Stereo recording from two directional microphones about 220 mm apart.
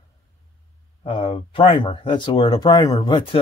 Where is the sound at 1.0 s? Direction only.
25° left (ahead or behind).